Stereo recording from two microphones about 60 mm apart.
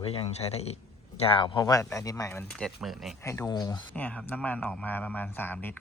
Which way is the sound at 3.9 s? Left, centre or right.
Left.